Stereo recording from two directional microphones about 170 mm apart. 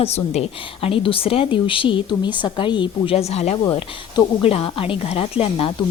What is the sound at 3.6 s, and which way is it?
A woman's voice, 30° left (ahead or behind).